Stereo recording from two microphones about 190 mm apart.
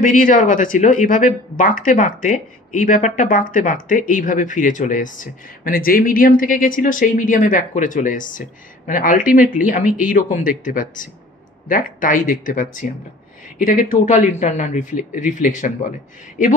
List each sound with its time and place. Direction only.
0.0 s speech: 45° left (ahead or behind)